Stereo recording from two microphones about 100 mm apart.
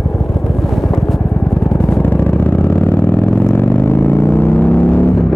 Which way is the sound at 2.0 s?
20° left (ahead or behind).